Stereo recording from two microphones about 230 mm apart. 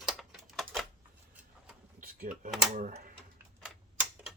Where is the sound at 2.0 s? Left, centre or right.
Right.